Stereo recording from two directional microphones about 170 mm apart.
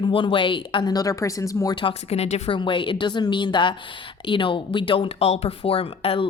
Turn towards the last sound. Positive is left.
turn(degrees=35)  # may be behind; listen again after turning